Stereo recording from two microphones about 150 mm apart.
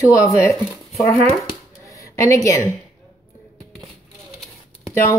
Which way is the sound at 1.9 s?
20° left (ahead or behind).